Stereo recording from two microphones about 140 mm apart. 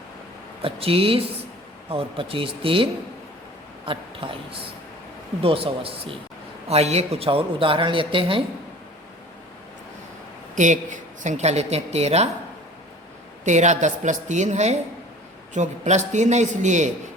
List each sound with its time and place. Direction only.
0.6 s a woman's voice: 45° right (ahead or behind)
10.5 s a woman's voice: 60° right (ahead or behind)
13.4 s a woman's voice: 60° right (ahead or behind)